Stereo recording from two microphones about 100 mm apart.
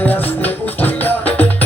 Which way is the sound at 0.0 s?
20° left (ahead or behind).